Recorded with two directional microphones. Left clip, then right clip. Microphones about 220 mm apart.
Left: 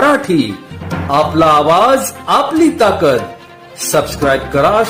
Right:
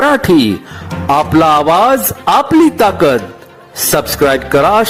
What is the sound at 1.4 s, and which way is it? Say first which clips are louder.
Speech: even; 35° right (ahead or behind).